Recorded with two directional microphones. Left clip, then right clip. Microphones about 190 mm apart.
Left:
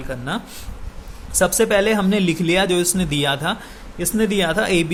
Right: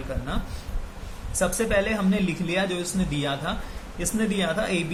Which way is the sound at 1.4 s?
50° left (ahead or behind).